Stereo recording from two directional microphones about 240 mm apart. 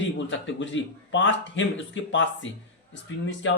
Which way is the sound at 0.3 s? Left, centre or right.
Left.